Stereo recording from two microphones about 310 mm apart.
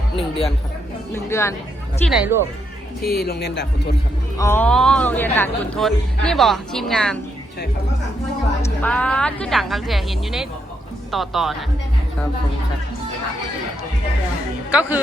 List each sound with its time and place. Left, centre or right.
0.2 s a woman's voice: centre
2.0 s speech: centre
3.0 s speech: left
4.4 s speech: centre
8.8 s speech: centre
14.7 s speech: centre